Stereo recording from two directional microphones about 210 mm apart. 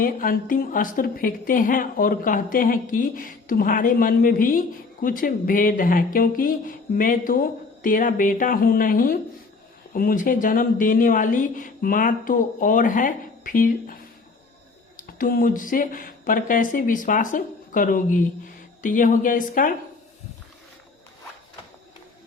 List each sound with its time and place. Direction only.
0.0 s a woman's voice: 40° left (ahead or behind)